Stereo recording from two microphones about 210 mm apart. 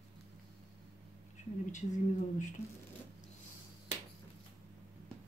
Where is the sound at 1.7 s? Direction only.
35° left (ahead or behind).